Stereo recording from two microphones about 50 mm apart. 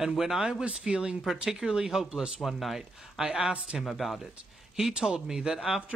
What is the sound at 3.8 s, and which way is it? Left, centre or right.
Speech, centre.